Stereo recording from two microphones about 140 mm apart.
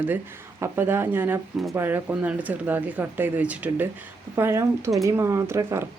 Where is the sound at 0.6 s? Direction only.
15° right (ahead or behind).